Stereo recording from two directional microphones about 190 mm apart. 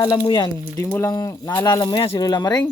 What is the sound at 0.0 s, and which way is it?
Speech, 20° left (ahead or behind).